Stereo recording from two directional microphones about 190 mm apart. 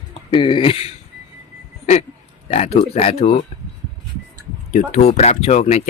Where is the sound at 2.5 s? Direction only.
35° left (ahead or behind).